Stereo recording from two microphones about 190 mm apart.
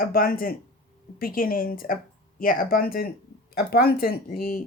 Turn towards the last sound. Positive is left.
turn(degrees=50)  # may be behind; listen again after turning